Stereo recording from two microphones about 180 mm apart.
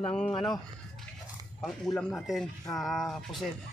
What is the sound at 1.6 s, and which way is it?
Speech, centre (ahead or behind).